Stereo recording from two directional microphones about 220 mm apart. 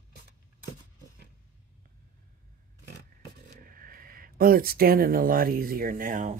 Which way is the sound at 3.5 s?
40° right (ahead or behind).